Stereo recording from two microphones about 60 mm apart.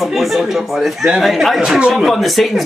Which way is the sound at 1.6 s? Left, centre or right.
Centre.